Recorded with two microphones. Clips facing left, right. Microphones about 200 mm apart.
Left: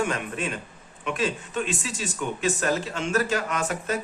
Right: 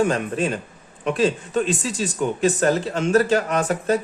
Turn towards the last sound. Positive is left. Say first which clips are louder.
# right 7 dB
turn(degrees=-35)  # may be behind; listen again after turning